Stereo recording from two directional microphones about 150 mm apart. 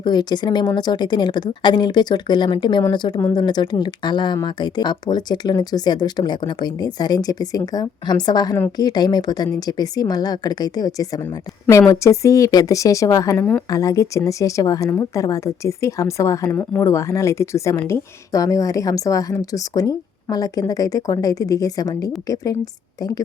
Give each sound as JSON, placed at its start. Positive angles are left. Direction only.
{"t": 0.0, "sound": "a woman's voice", "side_deg": 30}